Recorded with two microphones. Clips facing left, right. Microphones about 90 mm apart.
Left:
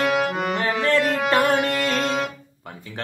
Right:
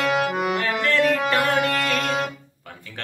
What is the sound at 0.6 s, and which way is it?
Music, 30° left (ahead or behind).